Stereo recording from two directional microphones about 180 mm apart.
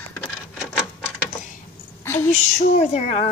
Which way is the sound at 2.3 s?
40° left (ahead or behind).